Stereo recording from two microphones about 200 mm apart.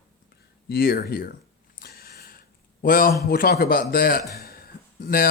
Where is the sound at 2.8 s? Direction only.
45° left (ahead or behind).